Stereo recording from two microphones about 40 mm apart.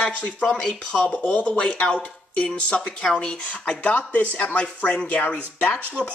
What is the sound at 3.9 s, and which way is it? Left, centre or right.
Speech, left.